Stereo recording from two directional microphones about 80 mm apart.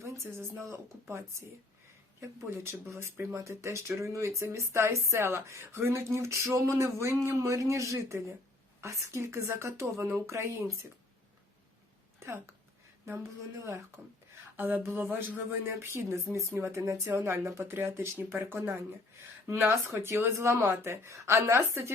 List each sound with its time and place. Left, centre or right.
0.0 s speech: right
2.5 s speech: right
12.2 s speech: right
14.5 s speech: right